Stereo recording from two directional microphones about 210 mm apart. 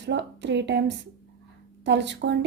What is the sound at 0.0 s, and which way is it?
A woman's voice, 55° right (ahead or behind).